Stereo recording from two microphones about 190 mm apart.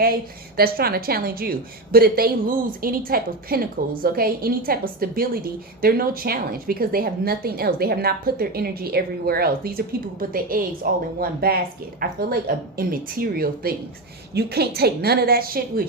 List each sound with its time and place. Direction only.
0.0 s a woman's voice: 50° right (ahead or behind)